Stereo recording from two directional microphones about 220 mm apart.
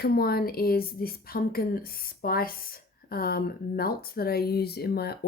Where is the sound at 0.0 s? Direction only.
45° left (ahead or behind).